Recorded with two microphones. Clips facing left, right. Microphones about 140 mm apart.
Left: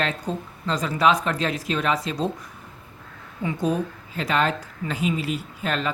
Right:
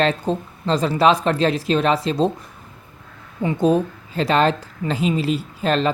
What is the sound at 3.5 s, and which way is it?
A woman's voice, 25° right (ahead or behind).